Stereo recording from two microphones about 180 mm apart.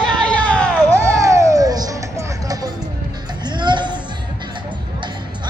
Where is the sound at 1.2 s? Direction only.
15° right (ahead or behind).